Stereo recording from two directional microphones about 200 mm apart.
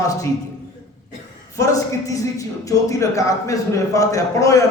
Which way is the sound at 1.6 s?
15° left (ahead or behind).